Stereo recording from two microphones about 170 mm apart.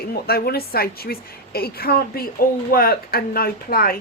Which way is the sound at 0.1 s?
65° left (ahead or behind).